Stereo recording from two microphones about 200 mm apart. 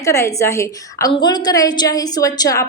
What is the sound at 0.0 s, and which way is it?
A woman's voice, 15° left (ahead or behind).